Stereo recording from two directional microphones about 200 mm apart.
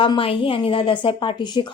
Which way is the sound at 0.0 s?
25° left (ahead or behind).